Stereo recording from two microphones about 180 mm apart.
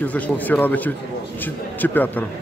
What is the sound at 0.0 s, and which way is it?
Speech, 10° left (ahead or behind).